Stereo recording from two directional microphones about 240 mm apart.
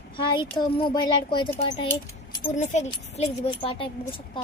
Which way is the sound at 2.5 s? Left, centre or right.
Left.